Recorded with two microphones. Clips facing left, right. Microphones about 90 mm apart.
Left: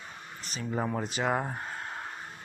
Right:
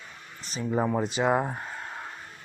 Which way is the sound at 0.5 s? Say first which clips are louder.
Right 5 dB; 35° right (ahead or behind).